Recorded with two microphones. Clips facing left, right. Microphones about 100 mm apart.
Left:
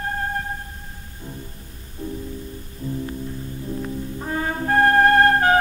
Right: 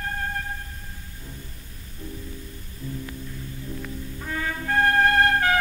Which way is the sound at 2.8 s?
30° left (ahead or behind).